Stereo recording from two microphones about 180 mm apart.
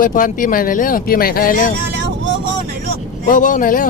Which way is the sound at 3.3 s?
45° left (ahead or behind).